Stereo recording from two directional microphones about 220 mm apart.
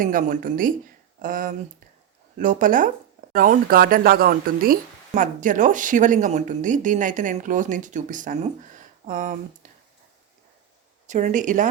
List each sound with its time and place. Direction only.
0.0 s speech: 35° right (ahead or behind)
9.6 s a sound: 35° right (ahead or behind)
11.0 s speech: 35° right (ahead or behind)